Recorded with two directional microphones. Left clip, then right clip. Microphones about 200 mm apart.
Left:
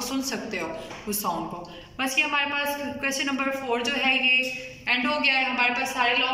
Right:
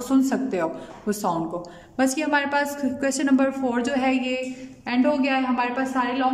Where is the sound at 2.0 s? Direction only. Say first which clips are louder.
Right 2 dB; 55° right (ahead or behind).